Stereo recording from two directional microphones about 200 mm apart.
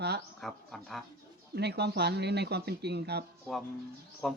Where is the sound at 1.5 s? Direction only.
55° right (ahead or behind).